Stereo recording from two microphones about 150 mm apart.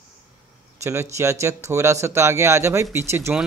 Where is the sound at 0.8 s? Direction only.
20° right (ahead or behind).